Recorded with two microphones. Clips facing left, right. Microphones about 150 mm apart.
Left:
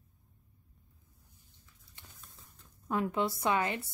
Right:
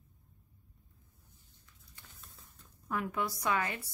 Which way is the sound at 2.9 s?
25° left (ahead or behind).